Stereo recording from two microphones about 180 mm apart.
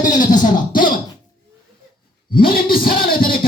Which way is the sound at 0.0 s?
45° left (ahead or behind).